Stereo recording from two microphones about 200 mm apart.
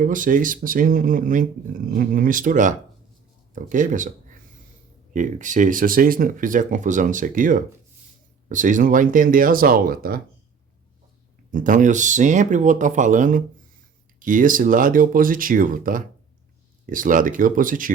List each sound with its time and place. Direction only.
0.0 s speech: 40° right (ahead or behind)
5.1 s speech: 40° right (ahead or behind)
11.5 s speech: 40° right (ahead or behind)